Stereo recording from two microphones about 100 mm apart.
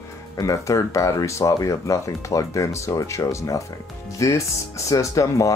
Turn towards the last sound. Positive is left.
turn(degrees=35)  # may be behind; listen again after turning